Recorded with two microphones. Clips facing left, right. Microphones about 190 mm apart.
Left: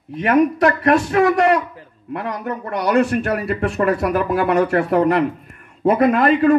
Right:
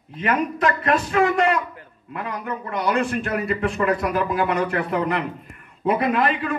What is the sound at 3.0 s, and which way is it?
A man's voice, 60° left (ahead or behind).